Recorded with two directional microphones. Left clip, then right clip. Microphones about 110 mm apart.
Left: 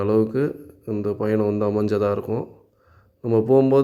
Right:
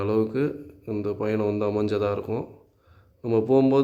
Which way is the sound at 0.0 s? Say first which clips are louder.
Left 4 dB; 30° left (ahead or behind).